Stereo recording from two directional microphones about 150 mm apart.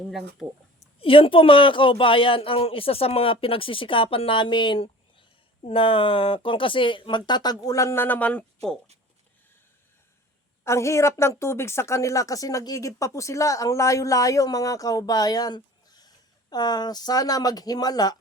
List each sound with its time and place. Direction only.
0.4 s speech: 10° right (ahead or behind)
0.9 s speech: 35° left (ahead or behind); by 8.4 s 10° left (ahead or behind)
10.6 s a woman's voice: 20° left (ahead or behind)